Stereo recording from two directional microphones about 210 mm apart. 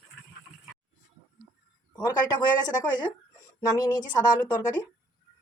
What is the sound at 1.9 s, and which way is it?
Speech, 20° left (ahead or behind).